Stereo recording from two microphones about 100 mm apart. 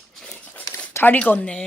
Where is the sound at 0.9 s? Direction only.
15° left (ahead or behind).